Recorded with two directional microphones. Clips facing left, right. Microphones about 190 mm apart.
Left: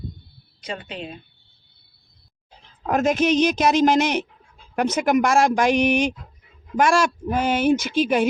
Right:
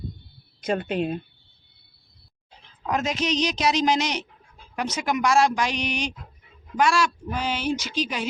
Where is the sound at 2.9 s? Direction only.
50° left (ahead or behind).